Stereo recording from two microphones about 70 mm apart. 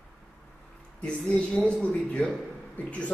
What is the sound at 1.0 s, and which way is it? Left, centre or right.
A man's voice, centre.